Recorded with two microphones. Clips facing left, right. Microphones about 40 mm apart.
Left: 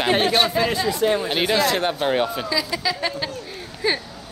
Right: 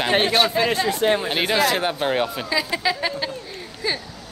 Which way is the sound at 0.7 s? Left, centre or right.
Right.